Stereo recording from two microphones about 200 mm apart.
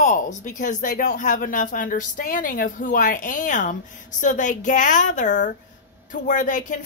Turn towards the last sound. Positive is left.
turn(degrees=40)  # may be behind; listen again after turning